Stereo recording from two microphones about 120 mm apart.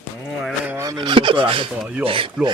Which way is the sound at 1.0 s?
45° right (ahead or behind).